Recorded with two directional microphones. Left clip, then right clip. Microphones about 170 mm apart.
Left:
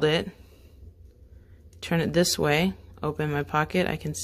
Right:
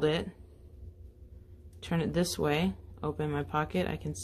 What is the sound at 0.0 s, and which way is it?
Speech, 30° left (ahead or behind).